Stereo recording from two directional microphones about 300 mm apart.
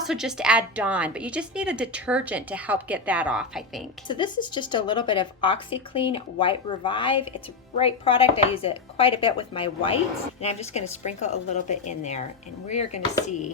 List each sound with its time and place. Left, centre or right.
0.0 s a woman's voice: centre
4.1 s a woman's voice: centre